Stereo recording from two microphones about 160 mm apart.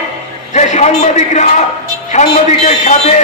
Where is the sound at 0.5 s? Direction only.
45° left (ahead or behind).